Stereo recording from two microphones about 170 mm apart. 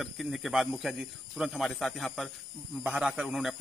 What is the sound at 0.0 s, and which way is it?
A man's voice, centre (ahead or behind).